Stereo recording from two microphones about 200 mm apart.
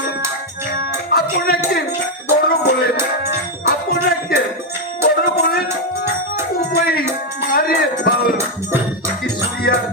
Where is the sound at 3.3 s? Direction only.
50° left (ahead or behind).